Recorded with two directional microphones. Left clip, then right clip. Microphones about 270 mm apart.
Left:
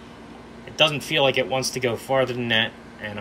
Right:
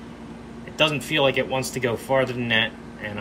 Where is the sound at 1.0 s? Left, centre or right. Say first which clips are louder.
Left 1 dB; centre.